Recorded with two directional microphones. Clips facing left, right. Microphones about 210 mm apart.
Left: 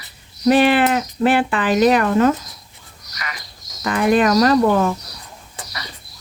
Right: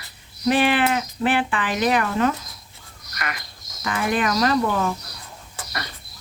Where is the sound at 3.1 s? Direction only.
55° right (ahead or behind).